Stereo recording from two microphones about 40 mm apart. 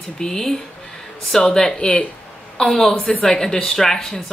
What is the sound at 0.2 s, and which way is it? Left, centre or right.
A woman's voice, centre.